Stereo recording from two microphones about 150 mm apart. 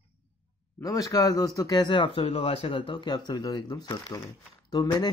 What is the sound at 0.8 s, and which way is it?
Speech, 25° left (ahead or behind).